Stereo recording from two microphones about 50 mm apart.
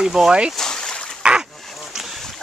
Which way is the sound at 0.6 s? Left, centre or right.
Centre.